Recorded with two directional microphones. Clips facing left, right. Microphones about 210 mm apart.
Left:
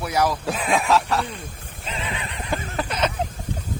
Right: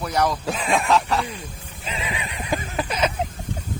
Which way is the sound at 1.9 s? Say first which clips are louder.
Right 1 dB; 5° right (ahead or behind).